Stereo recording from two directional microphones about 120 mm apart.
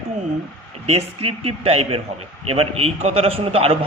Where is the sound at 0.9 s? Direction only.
55° right (ahead or behind).